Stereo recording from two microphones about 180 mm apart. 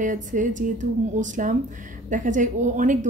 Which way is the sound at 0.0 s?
45° right (ahead or behind).